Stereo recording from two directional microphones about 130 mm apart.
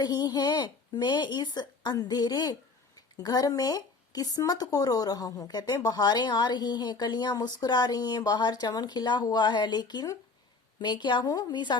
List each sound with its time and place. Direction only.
0.0 s speech: 35° left (ahead or behind)